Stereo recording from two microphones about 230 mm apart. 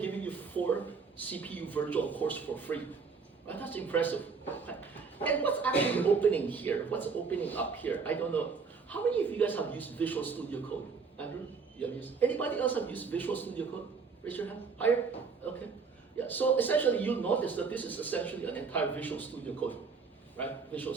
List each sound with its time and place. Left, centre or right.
0.0 s a sound: centre
1.2 s a man's voice: centre
11.8 s a man's voice: centre
16.2 s a man's voice: centre